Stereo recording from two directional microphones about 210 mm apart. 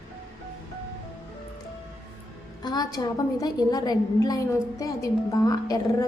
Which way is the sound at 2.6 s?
20° left (ahead or behind).